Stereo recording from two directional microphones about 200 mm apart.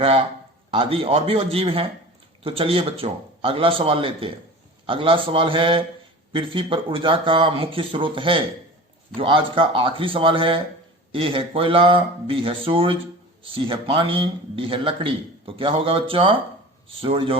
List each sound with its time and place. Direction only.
0.7 s a man's voice: 25° right (ahead or behind)